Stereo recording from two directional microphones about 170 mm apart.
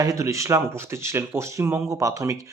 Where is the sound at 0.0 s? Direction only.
20° right (ahead or behind).